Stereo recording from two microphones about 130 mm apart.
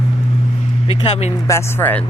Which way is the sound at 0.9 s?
50° left (ahead or behind).